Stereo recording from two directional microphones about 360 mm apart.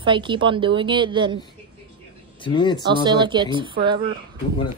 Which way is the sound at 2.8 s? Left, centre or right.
Centre.